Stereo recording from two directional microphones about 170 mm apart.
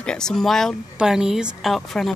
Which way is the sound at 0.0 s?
5° left (ahead or behind).